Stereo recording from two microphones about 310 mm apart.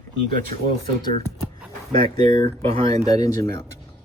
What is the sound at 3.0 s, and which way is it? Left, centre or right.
Speech, centre.